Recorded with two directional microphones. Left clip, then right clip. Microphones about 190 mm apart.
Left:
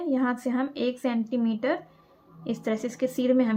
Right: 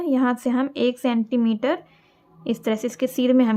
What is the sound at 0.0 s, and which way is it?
A woman's voice, 30° right (ahead or behind).